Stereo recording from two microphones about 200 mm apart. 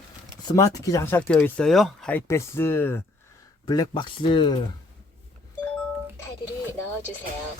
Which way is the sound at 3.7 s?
20° left (ahead or behind).